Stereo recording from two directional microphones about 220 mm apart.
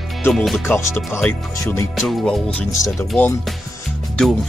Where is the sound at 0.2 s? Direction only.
5° left (ahead or behind).